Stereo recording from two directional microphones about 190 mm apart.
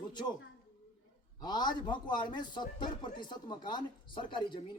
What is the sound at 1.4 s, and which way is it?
A man's voice, 20° left (ahead or behind).